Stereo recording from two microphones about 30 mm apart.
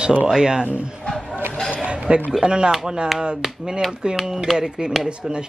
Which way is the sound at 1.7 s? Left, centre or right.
Right.